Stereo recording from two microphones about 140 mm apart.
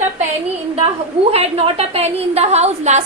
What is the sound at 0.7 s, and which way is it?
A woman's voice, 45° right (ahead or behind).